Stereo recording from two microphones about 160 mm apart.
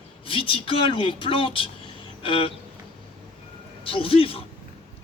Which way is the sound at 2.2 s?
35° left (ahead or behind).